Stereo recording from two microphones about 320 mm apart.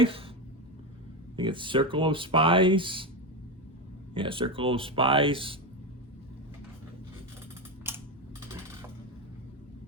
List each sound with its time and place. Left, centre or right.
0.0 s speech: centre
1.4 s speech: centre
4.1 s speech: centre
7.9 s typing: centre